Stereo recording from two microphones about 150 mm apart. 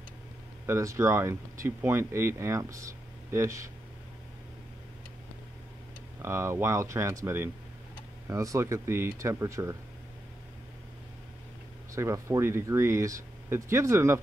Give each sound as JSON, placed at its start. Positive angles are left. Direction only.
{"t": 0.7, "sound": "speech", "side_deg": -20}
{"t": 6.2, "sound": "speech", "side_deg": -15}
{"t": 11.9, "sound": "speech", "side_deg": -20}